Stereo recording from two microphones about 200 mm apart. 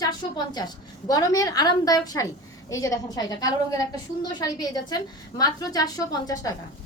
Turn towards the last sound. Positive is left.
turn(degrees=15)  # may be behind; listen again after turning